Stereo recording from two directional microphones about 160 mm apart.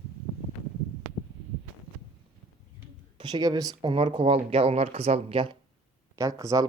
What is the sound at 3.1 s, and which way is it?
Speech, 25° right (ahead or behind).